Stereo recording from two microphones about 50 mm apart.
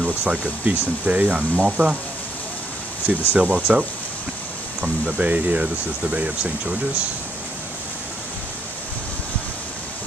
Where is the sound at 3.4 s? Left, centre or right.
Right.